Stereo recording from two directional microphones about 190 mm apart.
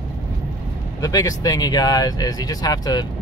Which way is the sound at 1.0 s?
20° left (ahead or behind).